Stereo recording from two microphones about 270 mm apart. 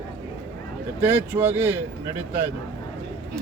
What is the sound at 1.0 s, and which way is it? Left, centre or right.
Speech, centre.